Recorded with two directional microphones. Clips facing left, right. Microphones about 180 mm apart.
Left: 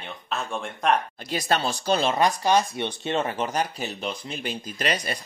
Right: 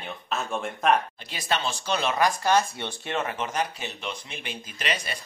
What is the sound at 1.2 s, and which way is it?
Speech, 40° left (ahead or behind).